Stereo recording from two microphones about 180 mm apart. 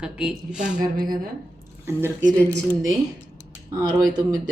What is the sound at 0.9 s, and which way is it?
Speech, 50° right (ahead or behind).